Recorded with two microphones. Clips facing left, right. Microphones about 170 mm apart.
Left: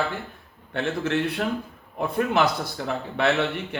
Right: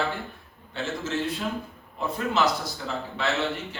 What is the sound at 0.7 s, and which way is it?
Speech, 60° left (ahead or behind).